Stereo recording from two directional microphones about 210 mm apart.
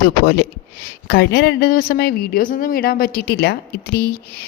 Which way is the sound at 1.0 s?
50° left (ahead or behind).